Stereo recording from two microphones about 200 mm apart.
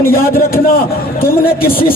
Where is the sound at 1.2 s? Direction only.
50° left (ahead or behind).